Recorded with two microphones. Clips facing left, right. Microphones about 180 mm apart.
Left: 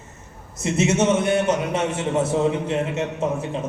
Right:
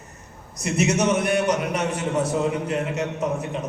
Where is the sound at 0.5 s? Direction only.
25° left (ahead or behind).